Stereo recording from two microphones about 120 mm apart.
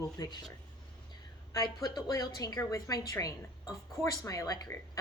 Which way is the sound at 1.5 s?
30° left (ahead or behind).